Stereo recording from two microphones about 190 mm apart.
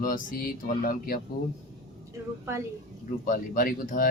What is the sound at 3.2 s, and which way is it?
Speech, 45° left (ahead or behind).